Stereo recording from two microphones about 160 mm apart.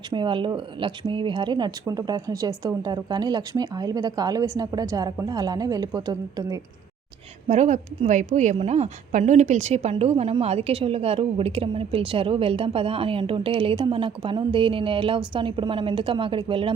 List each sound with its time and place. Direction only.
0.1 s speech: 30° right (ahead or behind)
7.4 s a woman's voice: 45° right (ahead or behind)